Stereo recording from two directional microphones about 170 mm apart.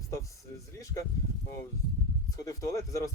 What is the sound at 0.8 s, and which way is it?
Speech, 20° left (ahead or behind).